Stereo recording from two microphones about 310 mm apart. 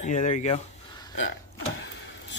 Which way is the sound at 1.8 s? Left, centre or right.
Left.